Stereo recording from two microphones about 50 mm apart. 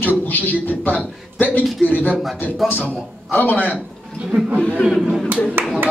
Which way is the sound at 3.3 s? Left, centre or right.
Left.